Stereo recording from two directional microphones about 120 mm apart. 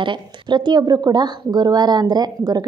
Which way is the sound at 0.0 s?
40° right (ahead or behind).